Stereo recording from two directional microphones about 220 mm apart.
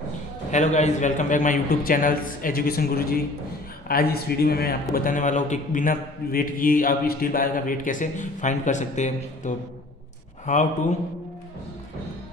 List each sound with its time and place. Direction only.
0.5 s a man's voice: 30° left (ahead or behind)